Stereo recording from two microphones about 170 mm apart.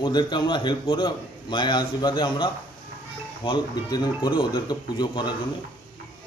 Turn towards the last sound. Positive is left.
turn(degrees=25)  # may be behind; listen again after turning